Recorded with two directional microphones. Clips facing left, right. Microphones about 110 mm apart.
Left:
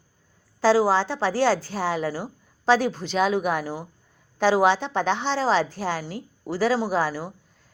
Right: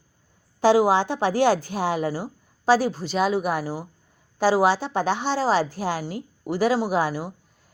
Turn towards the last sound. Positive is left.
turn(degrees=-15)  # may be behind; listen again after turning